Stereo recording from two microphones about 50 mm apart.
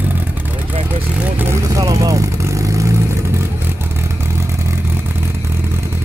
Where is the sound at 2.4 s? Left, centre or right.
Right.